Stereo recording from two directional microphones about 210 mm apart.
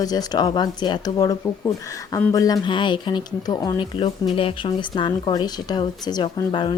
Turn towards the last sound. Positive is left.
turn(degrees=25)  # may be behind; listen again after turning